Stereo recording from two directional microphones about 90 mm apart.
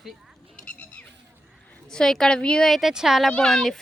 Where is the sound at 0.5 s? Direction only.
15° left (ahead or behind).